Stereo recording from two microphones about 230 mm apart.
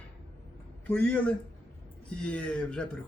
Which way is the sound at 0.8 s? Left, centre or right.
Centre.